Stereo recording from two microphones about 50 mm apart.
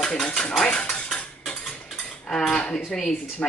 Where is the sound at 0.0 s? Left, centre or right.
Centre.